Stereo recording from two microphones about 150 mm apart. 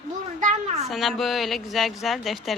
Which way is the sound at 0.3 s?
50° right (ahead or behind).